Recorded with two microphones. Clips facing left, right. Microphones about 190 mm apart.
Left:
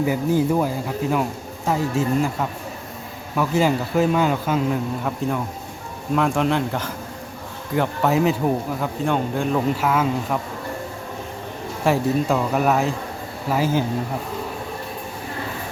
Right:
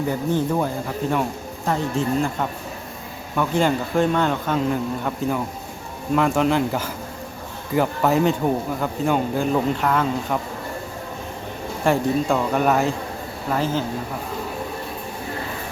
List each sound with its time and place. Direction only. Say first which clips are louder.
0.0 s speech: left 2 dB; 10° left (ahead or behind)
11.8 s speech: even; centre (ahead or behind)